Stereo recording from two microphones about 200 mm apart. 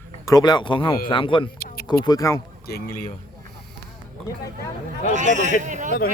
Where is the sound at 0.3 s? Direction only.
20° left (ahead or behind).